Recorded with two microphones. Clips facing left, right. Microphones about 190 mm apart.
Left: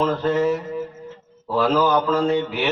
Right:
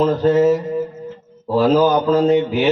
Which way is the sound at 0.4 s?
40° right (ahead or behind).